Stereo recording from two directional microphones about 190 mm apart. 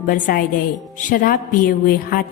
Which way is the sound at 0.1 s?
50° left (ahead or behind).